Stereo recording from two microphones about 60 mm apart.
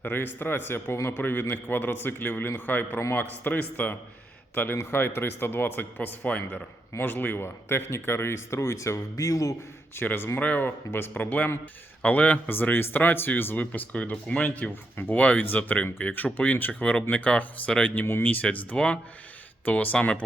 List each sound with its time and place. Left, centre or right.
0.0 s a man's voice: left
9.9 s a man's voice: left
18.0 s speech: left
18.7 s speech: centre
19.6 s a man's voice: left